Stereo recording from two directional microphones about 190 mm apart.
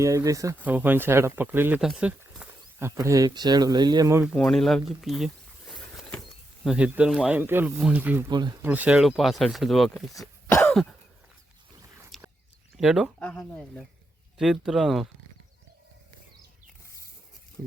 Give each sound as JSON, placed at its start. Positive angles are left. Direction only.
{"t": 0.0, "sound": "speech", "side_deg": -15}
{"t": 4.2, "sound": "speech", "side_deg": 0}
{"t": 5.7, "sound": "a sound", "side_deg": 0}
{"t": 6.7, "sound": "speech", "side_deg": -5}
{"t": 8.3, "sound": "speech", "side_deg": -25}
{"t": 8.6, "sound": "speech", "side_deg": -10}
{"t": 10.7, "sound": "throat clearing", "side_deg": 5}
{"t": 12.1, "sound": "a sound", "side_deg": 0}
{"t": 12.7, "sound": "speech", "side_deg": 0}